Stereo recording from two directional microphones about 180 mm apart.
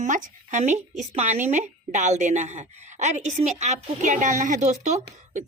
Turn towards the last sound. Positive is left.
turn(degrees=-40)  # may be behind; listen again after turning